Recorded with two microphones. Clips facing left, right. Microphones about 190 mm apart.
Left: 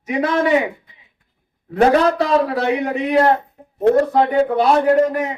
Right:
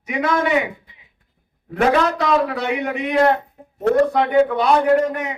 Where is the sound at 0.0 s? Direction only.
35° left (ahead or behind).